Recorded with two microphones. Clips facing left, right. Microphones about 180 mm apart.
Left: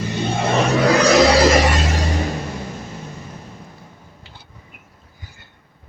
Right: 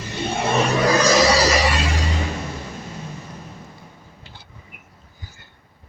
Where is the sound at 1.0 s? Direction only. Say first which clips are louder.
Left 4 dB; 60° left (ahead or behind).